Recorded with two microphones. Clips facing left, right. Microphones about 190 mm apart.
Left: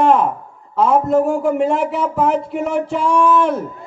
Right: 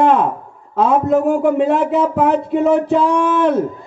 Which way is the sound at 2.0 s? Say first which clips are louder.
Right 2 dB; 60° right (ahead or behind).